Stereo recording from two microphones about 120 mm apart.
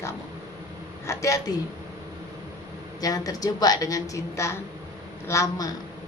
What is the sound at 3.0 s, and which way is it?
A woman's voice, 30° left (ahead or behind).